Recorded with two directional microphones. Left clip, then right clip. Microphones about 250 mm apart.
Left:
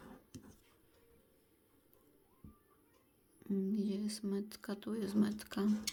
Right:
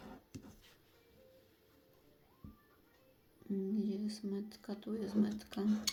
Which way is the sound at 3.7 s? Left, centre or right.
Left.